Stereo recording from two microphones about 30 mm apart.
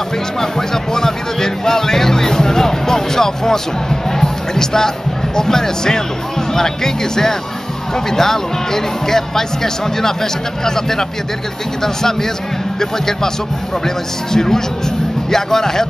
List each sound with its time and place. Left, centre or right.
0.4 s speech: centre
13.8 s speech: centre